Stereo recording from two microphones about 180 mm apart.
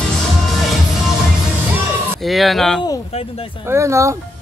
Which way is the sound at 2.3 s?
Centre (ahead or behind).